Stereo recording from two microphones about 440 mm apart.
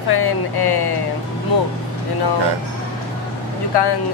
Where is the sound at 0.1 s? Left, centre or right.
Left.